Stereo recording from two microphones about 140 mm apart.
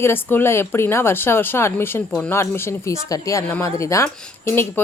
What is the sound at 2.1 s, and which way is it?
Speech, 5° left (ahead or behind).